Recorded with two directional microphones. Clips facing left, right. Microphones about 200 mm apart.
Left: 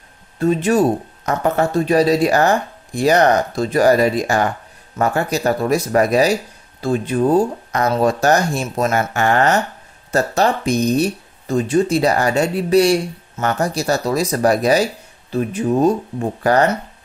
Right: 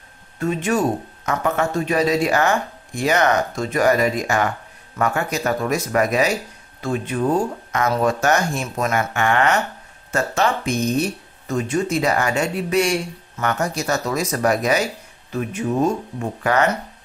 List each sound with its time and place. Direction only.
0.4 s speech: 35° left (ahead or behind)